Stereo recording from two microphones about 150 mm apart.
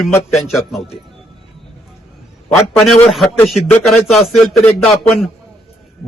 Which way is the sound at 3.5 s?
Centre (ahead or behind).